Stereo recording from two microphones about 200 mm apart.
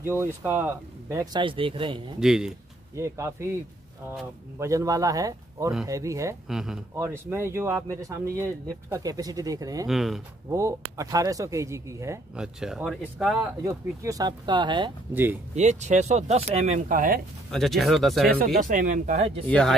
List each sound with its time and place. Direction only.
0.0 s speech: 10° right (ahead or behind)
2.1 s speech: 5° right (ahead or behind)
3.0 s speech: 15° right (ahead or behind)
4.6 s speech: 15° right (ahead or behind)
6.5 s speech: 5° right (ahead or behind)
9.8 s speech: centre (ahead or behind)
10.5 s speech: 15° right (ahead or behind)
12.4 s speech: 5° right (ahead or behind)
13.6 s speech: 15° right (ahead or behind)
15.5 s speech: 35° right (ahead or behind)
17.5 s speech: centre (ahead or behind)
18.4 s speech: 40° right (ahead or behind)
19.4 s speech: 5° left (ahead or behind)